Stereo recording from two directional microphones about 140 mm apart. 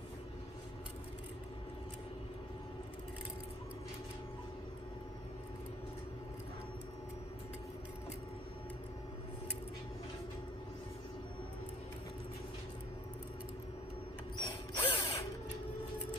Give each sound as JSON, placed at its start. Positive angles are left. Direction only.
{"t": 14.3, "sound": "mechanisms", "side_deg": 35}